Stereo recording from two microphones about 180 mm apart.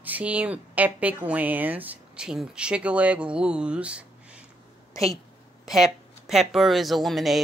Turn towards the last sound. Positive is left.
turn(degrees=0)  # may be behind; listen again after turning